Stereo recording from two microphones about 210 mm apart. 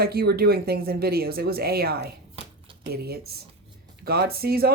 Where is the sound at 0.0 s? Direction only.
45° right (ahead or behind).